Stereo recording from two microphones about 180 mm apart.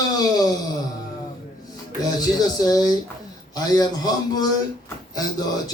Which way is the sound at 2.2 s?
20° left (ahead or behind).